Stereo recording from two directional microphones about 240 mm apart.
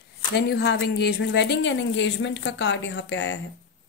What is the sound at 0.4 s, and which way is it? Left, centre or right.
A woman's voice, left.